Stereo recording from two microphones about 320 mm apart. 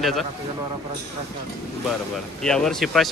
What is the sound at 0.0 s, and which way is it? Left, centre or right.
Speech, centre.